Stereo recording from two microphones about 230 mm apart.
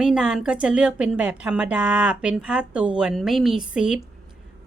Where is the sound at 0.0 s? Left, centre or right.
Centre.